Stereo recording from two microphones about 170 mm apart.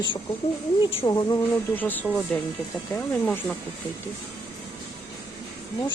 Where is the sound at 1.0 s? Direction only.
20° left (ahead or behind).